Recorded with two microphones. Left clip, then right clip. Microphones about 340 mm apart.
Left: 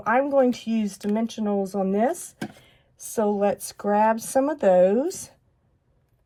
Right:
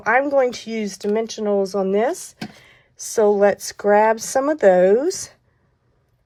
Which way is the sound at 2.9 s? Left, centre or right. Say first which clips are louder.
Right 8 dB; right.